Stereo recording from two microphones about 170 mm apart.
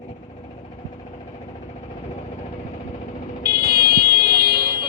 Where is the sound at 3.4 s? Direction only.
65° right (ahead or behind).